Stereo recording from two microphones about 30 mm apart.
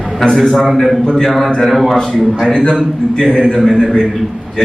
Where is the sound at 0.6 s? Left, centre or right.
Centre.